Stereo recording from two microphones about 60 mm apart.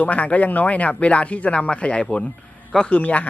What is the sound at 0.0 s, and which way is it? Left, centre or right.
Speech, left.